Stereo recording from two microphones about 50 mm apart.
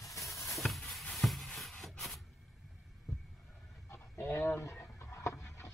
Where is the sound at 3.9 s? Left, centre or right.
Left.